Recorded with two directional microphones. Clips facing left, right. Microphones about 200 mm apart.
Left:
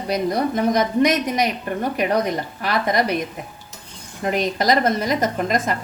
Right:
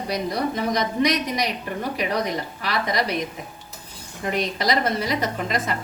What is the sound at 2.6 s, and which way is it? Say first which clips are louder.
Speech: left 5 dB; 50° left (ahead or behind).